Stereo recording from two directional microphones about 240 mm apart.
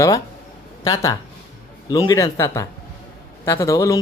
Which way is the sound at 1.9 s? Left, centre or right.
Centre.